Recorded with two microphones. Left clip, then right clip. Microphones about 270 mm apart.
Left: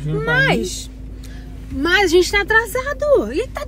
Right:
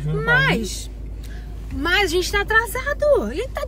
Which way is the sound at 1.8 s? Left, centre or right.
Centre.